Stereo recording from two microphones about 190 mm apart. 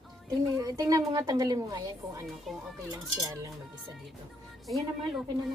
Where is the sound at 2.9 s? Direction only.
20° right (ahead or behind).